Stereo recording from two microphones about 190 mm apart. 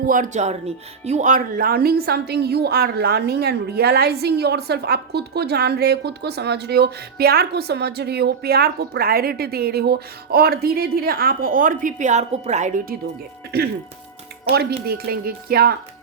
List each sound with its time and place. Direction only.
0.0 s a woman's voice: 45° right (ahead or behind)
13.5 s a woman's voice: 55° right (ahead or behind)